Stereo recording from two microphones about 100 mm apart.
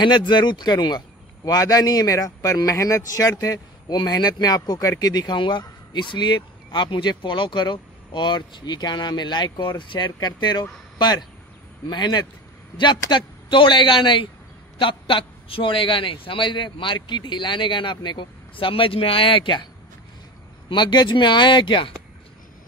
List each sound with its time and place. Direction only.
0.0 s a man's voice: 50° left (ahead or behind)
20.6 s a man's voice: 50° left (ahead or behind)